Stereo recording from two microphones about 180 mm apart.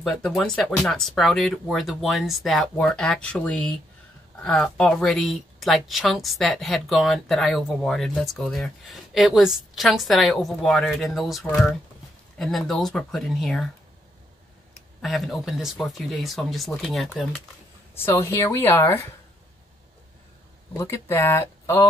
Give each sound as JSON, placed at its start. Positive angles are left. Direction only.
{"t": 0.0, "sound": "a woman's voice", "side_deg": 0}
{"t": 15.0, "sound": "a woman's voice", "side_deg": 0}
{"t": 17.9, "sound": "speech", "side_deg": 15}
{"t": 20.7, "sound": "speech", "side_deg": 15}